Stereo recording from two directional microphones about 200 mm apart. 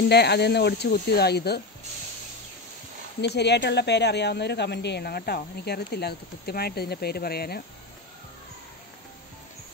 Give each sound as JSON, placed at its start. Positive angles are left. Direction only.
{"t": 0.1, "sound": "a woman's voice", "side_deg": 55}
{"t": 3.2, "sound": "a woman's voice", "side_deg": 55}